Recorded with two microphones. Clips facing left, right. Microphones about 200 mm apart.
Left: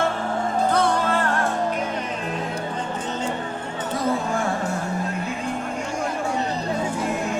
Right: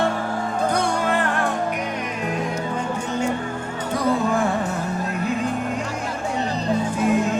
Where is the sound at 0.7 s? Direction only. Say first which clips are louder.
Left 1 dB; 15° right (ahead or behind).